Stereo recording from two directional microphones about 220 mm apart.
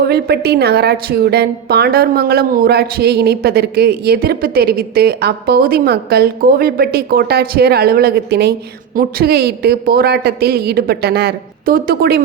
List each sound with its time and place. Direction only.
0.0 s a woman's voice: 45° right (ahead or behind)